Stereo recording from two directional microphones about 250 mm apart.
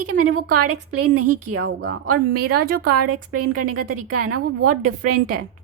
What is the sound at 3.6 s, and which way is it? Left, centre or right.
A woman's voice, right.